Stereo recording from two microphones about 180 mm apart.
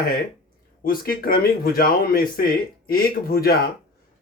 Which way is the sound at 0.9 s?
55° left (ahead or behind).